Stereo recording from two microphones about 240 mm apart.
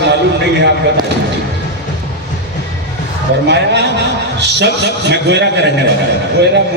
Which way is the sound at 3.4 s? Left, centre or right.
Right.